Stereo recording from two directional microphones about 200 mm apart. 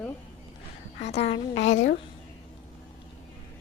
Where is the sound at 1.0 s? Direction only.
30° left (ahead or behind).